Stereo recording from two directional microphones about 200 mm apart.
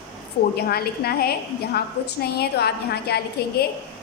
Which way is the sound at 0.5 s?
50° left (ahead or behind).